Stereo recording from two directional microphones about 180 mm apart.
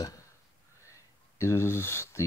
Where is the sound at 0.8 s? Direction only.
15° left (ahead or behind).